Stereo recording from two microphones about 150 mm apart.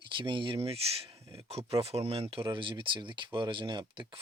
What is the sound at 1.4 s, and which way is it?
Speech, 40° right (ahead or behind).